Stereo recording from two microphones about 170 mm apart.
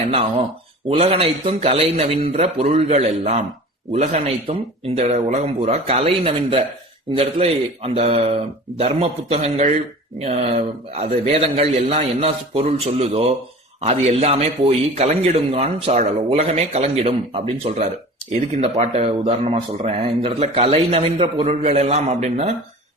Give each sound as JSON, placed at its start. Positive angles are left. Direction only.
{"t": 0.1, "sound": "speech", "side_deg": -40}